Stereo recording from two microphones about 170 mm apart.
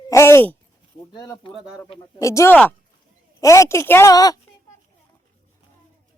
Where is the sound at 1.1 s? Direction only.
25° left (ahead or behind).